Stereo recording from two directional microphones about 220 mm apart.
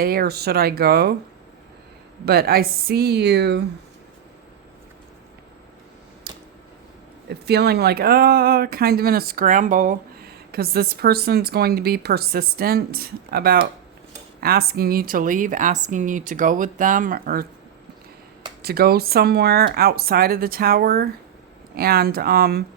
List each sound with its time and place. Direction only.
0.0 s speech: 45° right (ahead or behind)
2.2 s speech: 45° right (ahead or behind)
7.3 s speech: 45° right (ahead or behind)
18.6 s speech: 45° right (ahead or behind)